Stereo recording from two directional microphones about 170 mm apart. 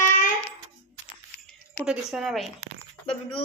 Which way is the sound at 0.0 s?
45° left (ahead or behind).